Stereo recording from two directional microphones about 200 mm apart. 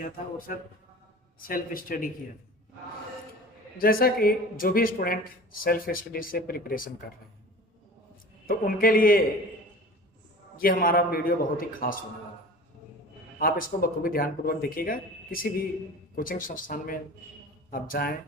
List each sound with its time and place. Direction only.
0.0 s speech: 45° left (ahead or behind)
3.8 s speech: 45° left (ahead or behind)
8.4 s speech: 45° left (ahead or behind)
10.6 s speech: 45° left (ahead or behind)
13.4 s speech: 45° left (ahead or behind)